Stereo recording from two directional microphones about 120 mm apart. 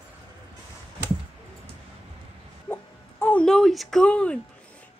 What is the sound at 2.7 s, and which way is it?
Music, 15° left (ahead or behind).